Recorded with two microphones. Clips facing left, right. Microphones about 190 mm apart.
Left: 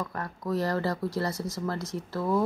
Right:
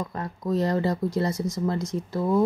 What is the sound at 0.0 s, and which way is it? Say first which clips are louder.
Speech: right 3 dB; 20° right (ahead or behind).